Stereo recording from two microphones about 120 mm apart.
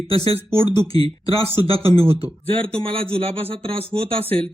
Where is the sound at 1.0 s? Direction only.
50° right (ahead or behind).